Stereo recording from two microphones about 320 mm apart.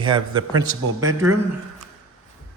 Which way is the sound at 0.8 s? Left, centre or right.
Right.